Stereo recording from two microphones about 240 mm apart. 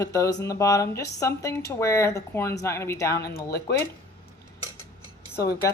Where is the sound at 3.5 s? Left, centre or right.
Left.